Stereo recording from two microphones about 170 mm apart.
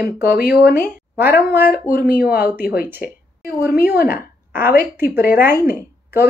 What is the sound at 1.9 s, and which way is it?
Speech, 65° left (ahead or behind).